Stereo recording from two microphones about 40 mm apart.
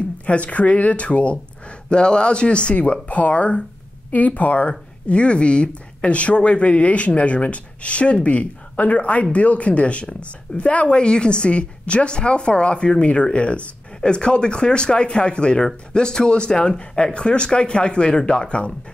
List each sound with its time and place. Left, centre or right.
0.3 s a woman's voice: left
11.0 s a woman's voice: left